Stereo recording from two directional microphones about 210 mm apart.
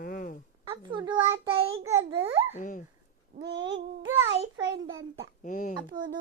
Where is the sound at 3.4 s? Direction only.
55° right (ahead or behind).